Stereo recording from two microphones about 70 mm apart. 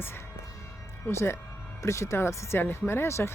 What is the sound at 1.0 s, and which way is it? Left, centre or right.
Speech, left.